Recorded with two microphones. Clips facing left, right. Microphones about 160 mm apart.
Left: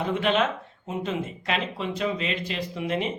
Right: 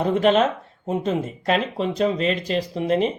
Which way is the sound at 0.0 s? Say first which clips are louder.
Right 6 dB; 40° right (ahead or behind).